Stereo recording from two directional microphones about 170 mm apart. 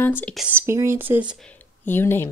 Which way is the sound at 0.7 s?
15° right (ahead or behind).